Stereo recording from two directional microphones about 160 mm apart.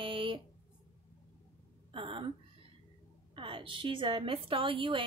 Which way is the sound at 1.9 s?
35° right (ahead or behind).